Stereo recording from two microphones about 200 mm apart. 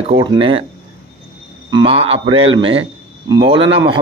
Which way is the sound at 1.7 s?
25° right (ahead or behind).